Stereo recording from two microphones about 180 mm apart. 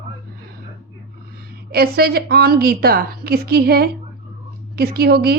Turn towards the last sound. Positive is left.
turn(degrees=-60)  # may be behind; listen again after turning